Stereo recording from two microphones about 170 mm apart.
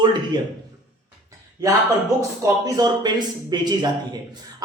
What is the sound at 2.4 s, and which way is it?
Speech, 25° right (ahead or behind).